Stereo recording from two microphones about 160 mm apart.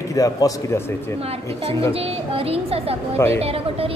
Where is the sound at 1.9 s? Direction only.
35° right (ahead or behind).